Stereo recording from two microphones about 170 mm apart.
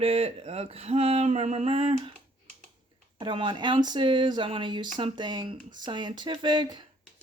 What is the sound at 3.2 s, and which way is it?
Speech, 30° right (ahead or behind).